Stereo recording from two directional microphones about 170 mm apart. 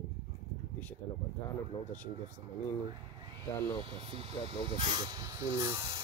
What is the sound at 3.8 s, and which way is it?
Speech, 35° right (ahead or behind).